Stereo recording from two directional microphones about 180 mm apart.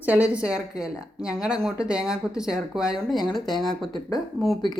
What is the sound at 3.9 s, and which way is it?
Speech, 20° left (ahead or behind).